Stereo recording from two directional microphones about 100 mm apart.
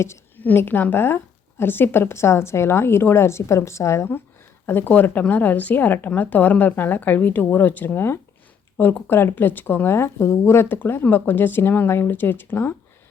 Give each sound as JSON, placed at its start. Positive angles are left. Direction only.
{"t": 0.0, "sound": "a woman's voice", "side_deg": 25}